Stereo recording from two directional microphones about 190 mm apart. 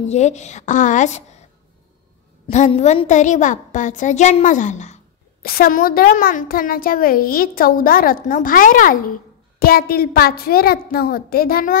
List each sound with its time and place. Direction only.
0.1 s a woman's voice: 35° left (ahead or behind)
2.4 s a woman's voice: 35° left (ahead or behind)
5.4 s a child's voice: 50° left (ahead or behind)